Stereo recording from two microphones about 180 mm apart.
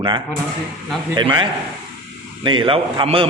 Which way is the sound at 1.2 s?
25° right (ahead or behind).